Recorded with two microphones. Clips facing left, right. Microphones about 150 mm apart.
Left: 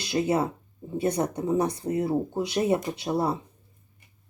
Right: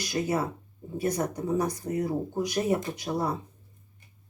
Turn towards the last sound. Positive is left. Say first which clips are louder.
# left 3 dB
turn(degrees=25)  # may be behind; listen again after turning